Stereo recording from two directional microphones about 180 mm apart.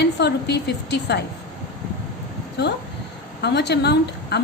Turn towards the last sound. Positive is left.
turn(degrees=65)  # may be behind; listen again after turning